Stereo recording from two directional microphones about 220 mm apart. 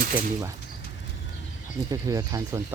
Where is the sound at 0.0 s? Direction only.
40° right (ahead or behind).